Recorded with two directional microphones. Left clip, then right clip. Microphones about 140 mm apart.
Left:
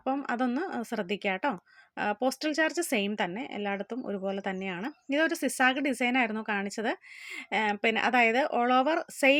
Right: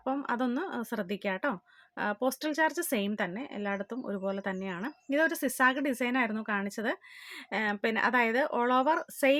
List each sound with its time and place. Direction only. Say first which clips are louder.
0.0 s speech: left 2 dB; 15° left (ahead or behind)